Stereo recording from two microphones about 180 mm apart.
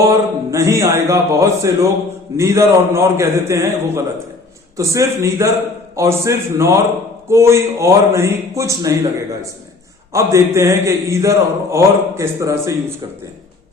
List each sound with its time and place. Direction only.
0.0 s a man's voice: 15° right (ahead or behind)